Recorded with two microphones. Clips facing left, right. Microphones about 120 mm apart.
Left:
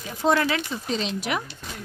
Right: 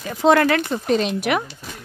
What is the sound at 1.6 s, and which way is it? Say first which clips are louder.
Horse: right 1 dB; 5° right (ahead or behind).